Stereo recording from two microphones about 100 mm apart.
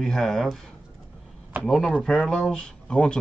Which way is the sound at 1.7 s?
5° left (ahead or behind).